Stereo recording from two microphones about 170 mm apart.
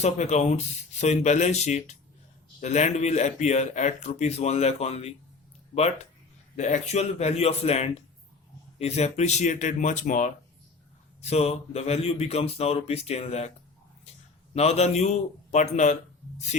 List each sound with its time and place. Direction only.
0.0 s a man's voice: 40° left (ahead or behind)
6.6 s a man's voice: 45° left (ahead or behind)
14.5 s a man's voice: 40° left (ahead or behind)